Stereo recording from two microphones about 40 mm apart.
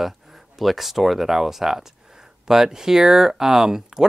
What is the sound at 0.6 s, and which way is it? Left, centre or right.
Speech, centre.